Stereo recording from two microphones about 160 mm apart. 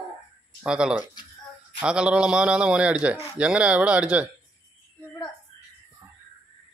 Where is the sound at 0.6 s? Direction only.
5° right (ahead or behind).